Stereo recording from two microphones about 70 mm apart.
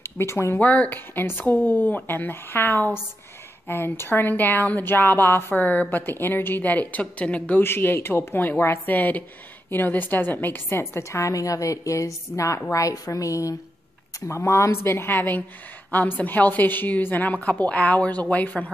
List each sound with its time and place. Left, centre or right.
0.0 s speech: left
0.6 s a woman's voice: left
7.6 s a woman's voice: left